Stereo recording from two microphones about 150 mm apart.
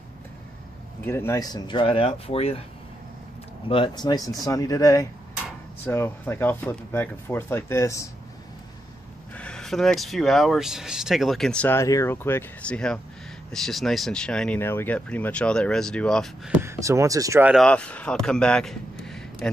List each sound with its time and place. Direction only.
1.0 s speech: 15° left (ahead or behind); by 2.6 s 40° left (ahead or behind)
3.6 s speech: 35° left (ahead or behind); by 8.1 s 20° left (ahead or behind)
9.3 s speech: 5° left (ahead or behind)
16.5 s speech: 20° right (ahead or behind)
17.6 s a man's voice: 5° left (ahead or behind)